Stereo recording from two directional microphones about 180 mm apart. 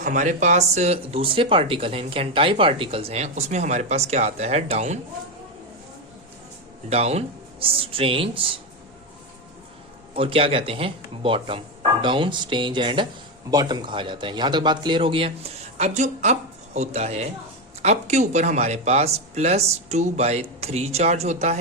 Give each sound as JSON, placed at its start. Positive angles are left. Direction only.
{"t": 0.0, "sound": "speech", "side_deg": -45}
{"t": 6.9, "sound": "speech", "side_deg": -35}
{"t": 10.2, "sound": "a man's voice", "side_deg": -30}